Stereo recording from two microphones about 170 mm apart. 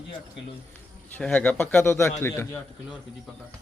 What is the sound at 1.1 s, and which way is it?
A man's voice, 10° left (ahead or behind).